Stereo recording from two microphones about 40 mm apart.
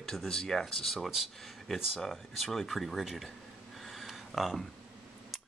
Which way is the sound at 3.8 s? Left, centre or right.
Centre.